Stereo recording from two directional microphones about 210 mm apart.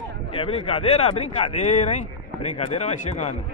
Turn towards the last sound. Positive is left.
turn(degrees=30)  # may be behind; listen again after turning